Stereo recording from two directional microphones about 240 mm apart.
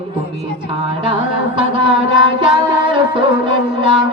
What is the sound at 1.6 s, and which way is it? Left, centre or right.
Music, right.